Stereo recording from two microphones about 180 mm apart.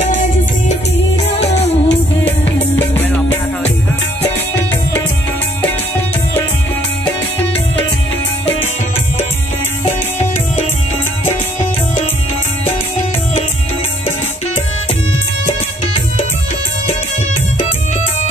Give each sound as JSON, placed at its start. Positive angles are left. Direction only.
{"t": 0.0, "sound": "music", "side_deg": 40}